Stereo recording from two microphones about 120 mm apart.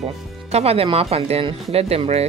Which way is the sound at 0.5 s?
60° right (ahead or behind).